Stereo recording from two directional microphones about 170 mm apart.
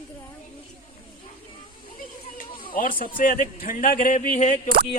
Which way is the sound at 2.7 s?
55° left (ahead or behind).